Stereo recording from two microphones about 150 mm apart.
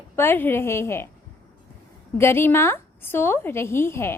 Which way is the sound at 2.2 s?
15° left (ahead or behind).